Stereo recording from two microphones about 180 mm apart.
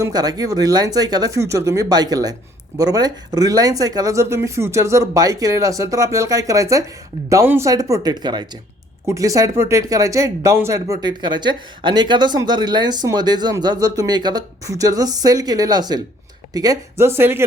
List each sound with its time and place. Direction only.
0.0 s speech: 20° right (ahead or behind)